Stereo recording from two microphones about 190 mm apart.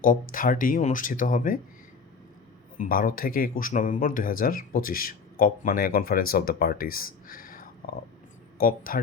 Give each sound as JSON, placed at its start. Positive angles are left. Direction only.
{"t": 0.0, "sound": "speech", "side_deg": 45}
{"t": 2.7, "sound": "speech", "side_deg": 50}